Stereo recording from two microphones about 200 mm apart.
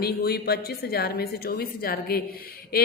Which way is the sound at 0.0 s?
50° left (ahead or behind).